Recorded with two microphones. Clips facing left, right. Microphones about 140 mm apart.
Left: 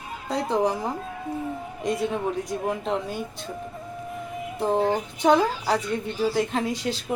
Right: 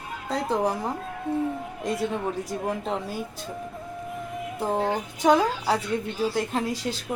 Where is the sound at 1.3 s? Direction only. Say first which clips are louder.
Right 5 dB; 25° right (ahead or behind).